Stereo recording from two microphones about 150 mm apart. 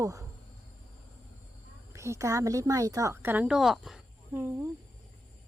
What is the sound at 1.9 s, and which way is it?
A woman's voice, 20° right (ahead or behind).